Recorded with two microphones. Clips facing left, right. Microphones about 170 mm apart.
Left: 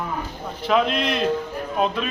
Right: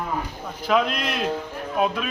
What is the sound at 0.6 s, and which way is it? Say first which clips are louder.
A man's voice: left 2 dB; centre (ahead or behind).